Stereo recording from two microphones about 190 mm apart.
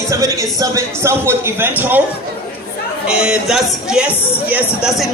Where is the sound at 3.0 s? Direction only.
5° right (ahead or behind).